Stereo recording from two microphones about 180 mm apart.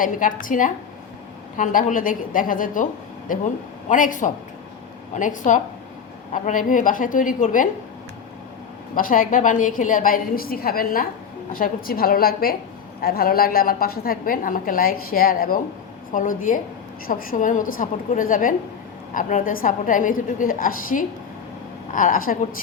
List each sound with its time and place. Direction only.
0.0 s a woman's voice: 50° left (ahead or behind)
9.0 s a woman's voice: 50° left (ahead or behind)